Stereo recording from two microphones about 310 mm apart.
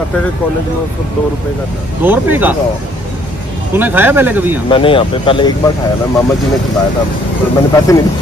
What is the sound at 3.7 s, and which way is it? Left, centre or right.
Speech, centre.